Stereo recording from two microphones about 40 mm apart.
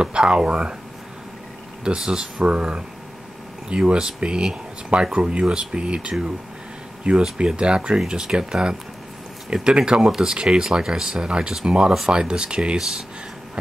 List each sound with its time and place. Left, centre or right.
0.0 s speech: right
2.0 s speech: centre
2.3 s speech: right
12.7 s speech: centre